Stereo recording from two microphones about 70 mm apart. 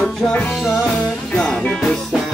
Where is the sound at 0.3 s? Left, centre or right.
Centre.